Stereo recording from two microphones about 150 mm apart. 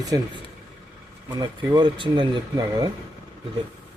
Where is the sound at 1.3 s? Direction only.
30° right (ahead or behind).